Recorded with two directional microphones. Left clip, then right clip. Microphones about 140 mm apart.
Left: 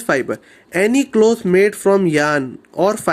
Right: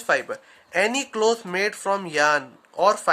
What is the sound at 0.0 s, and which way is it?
Speech, 30° left (ahead or behind).